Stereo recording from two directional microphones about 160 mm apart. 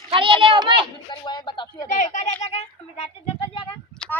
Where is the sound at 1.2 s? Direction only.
30° left (ahead or behind).